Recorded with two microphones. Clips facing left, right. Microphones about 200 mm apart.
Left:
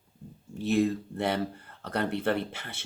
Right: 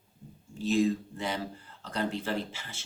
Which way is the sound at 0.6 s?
60° left (ahead or behind).